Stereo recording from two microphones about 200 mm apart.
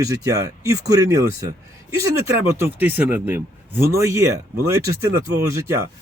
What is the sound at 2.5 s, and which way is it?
Speech, 10° right (ahead or behind).